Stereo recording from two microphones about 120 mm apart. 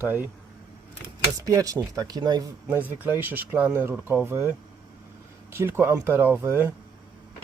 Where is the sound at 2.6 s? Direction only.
15° right (ahead or behind).